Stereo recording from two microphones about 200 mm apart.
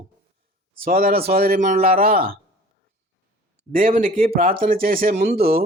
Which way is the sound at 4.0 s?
45° right (ahead or behind).